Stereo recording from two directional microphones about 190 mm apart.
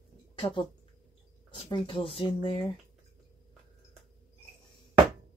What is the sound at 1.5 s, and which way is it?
A woman's voice, 25° left (ahead or behind).